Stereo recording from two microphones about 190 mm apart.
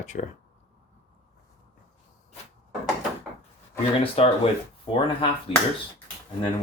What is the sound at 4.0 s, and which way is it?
Speech, 30° left (ahead or behind).